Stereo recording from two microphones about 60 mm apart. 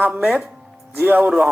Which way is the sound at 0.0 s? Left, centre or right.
Right.